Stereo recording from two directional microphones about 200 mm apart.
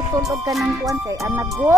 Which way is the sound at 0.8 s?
15° right (ahead or behind).